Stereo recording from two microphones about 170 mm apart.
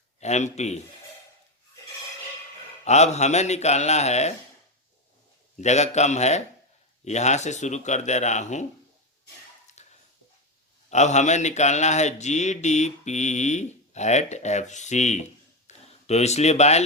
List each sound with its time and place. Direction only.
0.2 s speech: 40° left (ahead or behind)
2.8 s speech: 40° left (ahead or behind)
5.5 s speech: 40° left (ahead or behind)
9.7 s a sound: 45° left (ahead or behind)
10.8 s speech: 40° left (ahead or behind)